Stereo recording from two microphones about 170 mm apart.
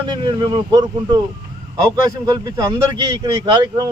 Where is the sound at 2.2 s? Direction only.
20° right (ahead or behind).